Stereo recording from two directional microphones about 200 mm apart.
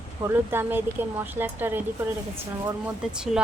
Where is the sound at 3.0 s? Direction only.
5° right (ahead or behind).